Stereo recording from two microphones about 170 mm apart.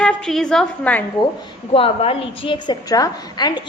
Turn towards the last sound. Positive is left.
turn(degrees=25)  # may be behind; listen again after turning